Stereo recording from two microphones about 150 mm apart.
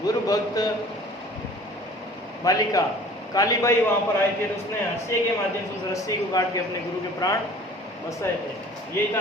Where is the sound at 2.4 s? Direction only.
25° left (ahead or behind).